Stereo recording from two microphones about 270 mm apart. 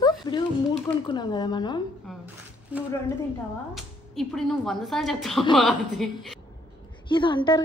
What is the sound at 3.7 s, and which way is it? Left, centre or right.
A woman's voice, centre.